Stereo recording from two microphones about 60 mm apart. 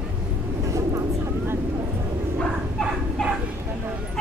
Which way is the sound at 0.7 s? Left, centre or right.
Right.